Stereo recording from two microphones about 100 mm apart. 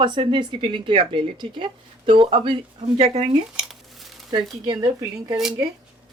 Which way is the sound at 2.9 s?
90° right.